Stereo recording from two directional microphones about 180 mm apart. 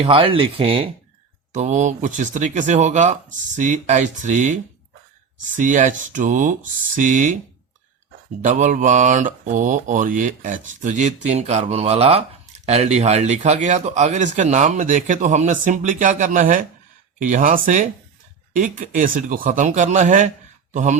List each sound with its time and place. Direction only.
0.0 s speech: 30° right (ahead or behind)
5.5 s speech: 45° right (ahead or behind)
8.4 s speech: 45° right (ahead or behind)